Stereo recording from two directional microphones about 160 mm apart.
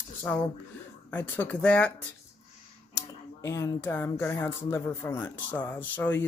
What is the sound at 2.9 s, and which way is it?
Speech, 20° left (ahead or behind).